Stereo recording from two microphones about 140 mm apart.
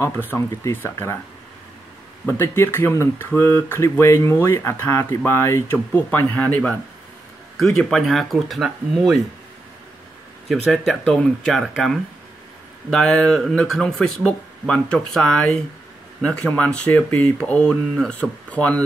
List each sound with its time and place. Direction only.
0.0 s speech: 20° left (ahead or behind)
2.2 s speech: 15° left (ahead or behind); by 9.2 s centre (ahead or behind)
10.9 s speech: 5° left (ahead or behind)